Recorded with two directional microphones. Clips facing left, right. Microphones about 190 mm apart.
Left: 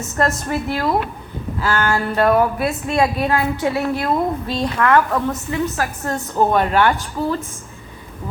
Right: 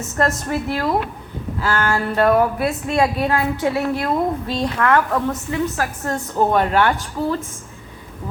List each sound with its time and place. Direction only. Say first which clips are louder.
0.2 s speech: even; 50° right (ahead or behind)